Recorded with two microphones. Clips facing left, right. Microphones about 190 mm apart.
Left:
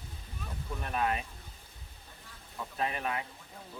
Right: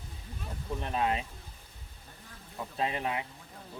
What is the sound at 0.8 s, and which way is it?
Speech, 20° right (ahead or behind).